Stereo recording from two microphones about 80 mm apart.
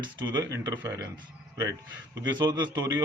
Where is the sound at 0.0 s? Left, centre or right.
Right.